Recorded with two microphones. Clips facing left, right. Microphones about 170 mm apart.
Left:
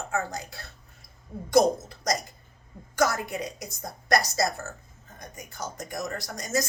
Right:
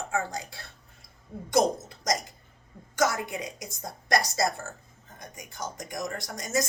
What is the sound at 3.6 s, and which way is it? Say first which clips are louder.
Speech: left 3 dB; 25° right (ahead or behind).